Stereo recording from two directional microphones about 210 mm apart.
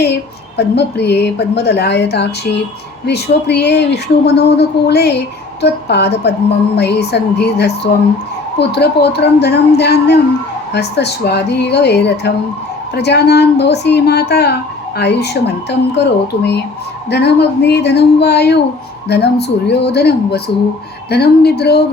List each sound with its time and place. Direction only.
0.0 s a woman's voice: 55° left (ahead or behind)